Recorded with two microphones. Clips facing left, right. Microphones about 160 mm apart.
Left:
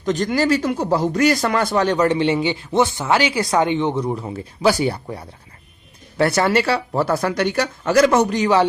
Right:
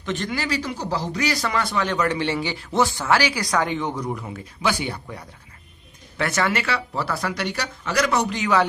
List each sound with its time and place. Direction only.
0.0 s speech: 40° left (ahead or behind)